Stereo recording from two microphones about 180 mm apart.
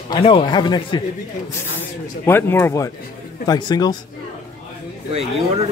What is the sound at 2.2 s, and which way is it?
A man's voice, 15° left (ahead or behind).